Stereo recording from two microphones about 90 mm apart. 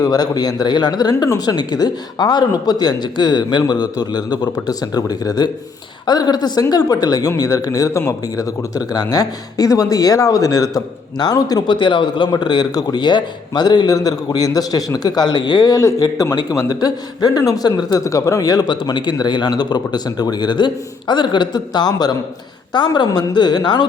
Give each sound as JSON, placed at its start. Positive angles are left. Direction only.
{"t": 0.0, "sound": "a man's voice", "side_deg": 45}
{"t": 11.7, "sound": "a man's voice", "side_deg": 65}
{"t": 15.8, "sound": "a man's voice", "side_deg": 35}
{"t": 18.7, "sound": "a man's voice", "side_deg": 60}